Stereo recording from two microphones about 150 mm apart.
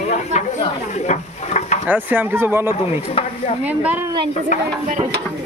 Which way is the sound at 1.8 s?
10° right (ahead or behind).